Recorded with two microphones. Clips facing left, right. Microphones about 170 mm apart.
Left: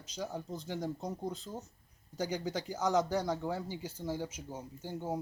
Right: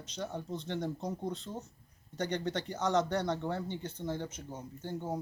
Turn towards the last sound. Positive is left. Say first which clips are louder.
# even
turn(degrees=10)  # may be behind; listen again after turning